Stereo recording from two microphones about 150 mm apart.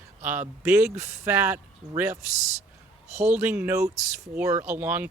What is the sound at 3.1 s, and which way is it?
Speech, 50° right (ahead or behind).